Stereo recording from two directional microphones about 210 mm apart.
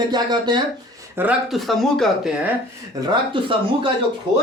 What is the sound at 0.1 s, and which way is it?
Speech, 20° right (ahead or behind).